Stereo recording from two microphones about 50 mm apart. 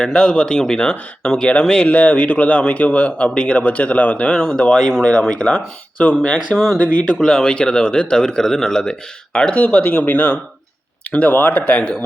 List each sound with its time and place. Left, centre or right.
0.0 s speech: centre
1.9 s speech: left
4.7 s speech: centre
5.5 s speech: left
6.5 s speech: centre; by 9.6 s left
9.6 s speech: left
11.7 s speech: left